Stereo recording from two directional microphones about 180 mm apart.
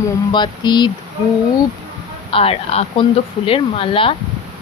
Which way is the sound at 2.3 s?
30° left (ahead or behind).